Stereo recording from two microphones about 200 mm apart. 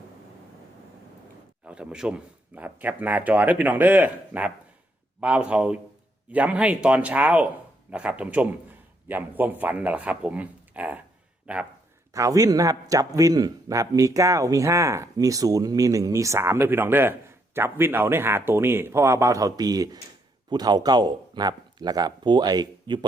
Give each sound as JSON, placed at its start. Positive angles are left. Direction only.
{"t": 1.6, "sound": "a man's voice", "side_deg": -5}